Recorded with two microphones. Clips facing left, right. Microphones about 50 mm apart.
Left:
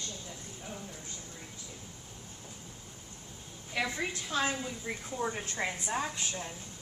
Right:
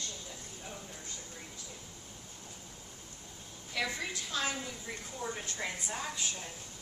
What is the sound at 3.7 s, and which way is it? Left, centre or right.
A woman's voice, left.